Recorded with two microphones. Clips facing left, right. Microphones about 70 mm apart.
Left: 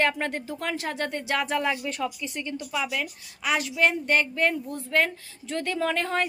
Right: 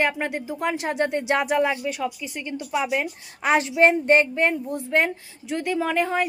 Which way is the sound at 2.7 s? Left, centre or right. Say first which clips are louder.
Right 6 dB; right.